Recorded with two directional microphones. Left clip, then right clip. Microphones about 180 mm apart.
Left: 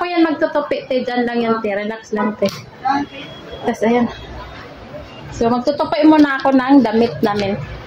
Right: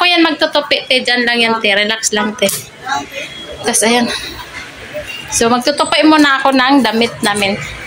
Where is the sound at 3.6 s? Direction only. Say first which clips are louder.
Right 4 dB; 10° left (ahead or behind).